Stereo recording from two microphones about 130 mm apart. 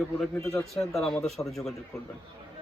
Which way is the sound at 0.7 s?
Centre (ahead or behind).